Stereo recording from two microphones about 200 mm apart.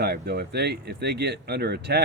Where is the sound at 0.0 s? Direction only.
55° right (ahead or behind).